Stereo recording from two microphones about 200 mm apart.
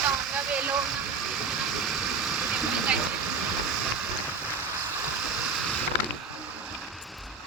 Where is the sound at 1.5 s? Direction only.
Centre (ahead or behind).